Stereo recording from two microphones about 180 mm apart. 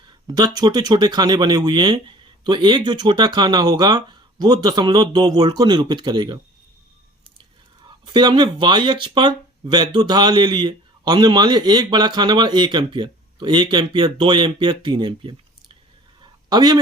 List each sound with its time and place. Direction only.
0.3 s speech: 20° right (ahead or behind)
7.9 s speech: 25° right (ahead or behind)
16.2 s a sound: 20° right (ahead or behind)